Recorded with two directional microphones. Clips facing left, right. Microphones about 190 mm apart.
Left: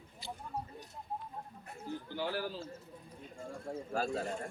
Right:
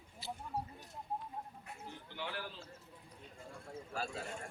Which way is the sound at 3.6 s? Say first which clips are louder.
Left 7 dB; 40° left (ahead or behind).